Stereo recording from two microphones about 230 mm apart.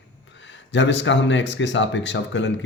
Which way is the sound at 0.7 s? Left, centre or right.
Left.